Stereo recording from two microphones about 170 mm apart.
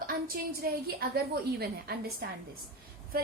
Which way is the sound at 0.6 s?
65° right (ahead or behind).